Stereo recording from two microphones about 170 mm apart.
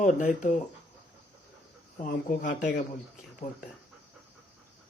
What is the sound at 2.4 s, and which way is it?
Speech, 90° left.